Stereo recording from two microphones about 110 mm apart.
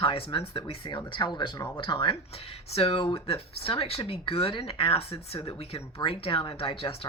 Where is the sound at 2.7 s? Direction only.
60° left (ahead or behind).